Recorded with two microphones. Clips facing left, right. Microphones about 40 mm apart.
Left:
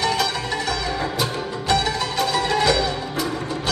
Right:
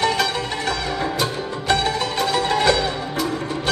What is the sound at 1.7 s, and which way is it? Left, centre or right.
Music, right.